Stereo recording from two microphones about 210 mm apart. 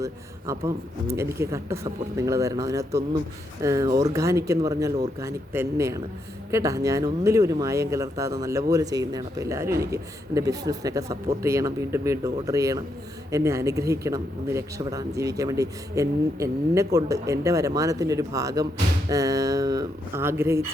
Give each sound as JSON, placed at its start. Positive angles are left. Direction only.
{"t": 0.0, "sound": "speech", "side_deg": -15}